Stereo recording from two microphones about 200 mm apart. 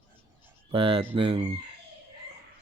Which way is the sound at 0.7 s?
25° right (ahead or behind).